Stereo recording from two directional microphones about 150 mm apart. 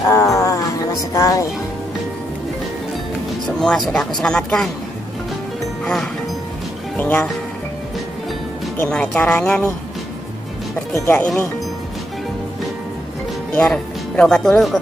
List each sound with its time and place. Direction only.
0.0 s music: 20° left (ahead or behind)
1.1 s speech: 20° left (ahead or behind)
3.4 s speech: 5° left (ahead or behind)
7.0 s speech: 10° left (ahead or behind)
8.7 s speech: 10° left (ahead or behind)
10.9 s speech: 15° left (ahead or behind)
13.6 s speech: 5° left (ahead or behind)